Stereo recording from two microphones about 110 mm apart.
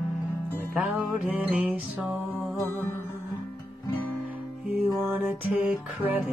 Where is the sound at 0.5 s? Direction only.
10° right (ahead or behind).